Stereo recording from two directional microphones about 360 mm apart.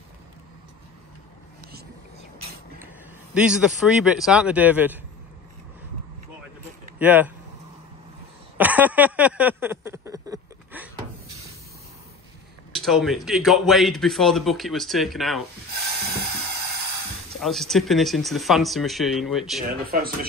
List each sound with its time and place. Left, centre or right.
3.3 s a man's voice: centre
7.0 s a man's voice: centre
8.5 s a sound: centre
12.7 s a man's voice: centre
17.4 s a man's voice: centre
19.6 s speech: right